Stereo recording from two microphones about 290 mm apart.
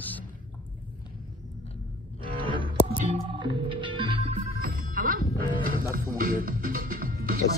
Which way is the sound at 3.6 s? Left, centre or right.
Centre.